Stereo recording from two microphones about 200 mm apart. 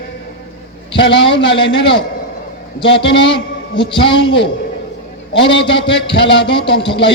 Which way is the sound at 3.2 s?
25° left (ahead or behind).